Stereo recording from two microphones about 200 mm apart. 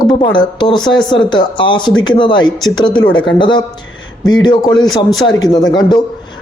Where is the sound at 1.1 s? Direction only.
25° left (ahead or behind).